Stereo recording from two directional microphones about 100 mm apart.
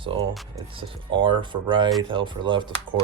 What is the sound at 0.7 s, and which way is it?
Speech, 60° right (ahead or behind).